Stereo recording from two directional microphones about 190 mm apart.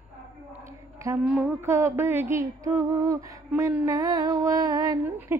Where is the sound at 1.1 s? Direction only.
15° right (ahead or behind).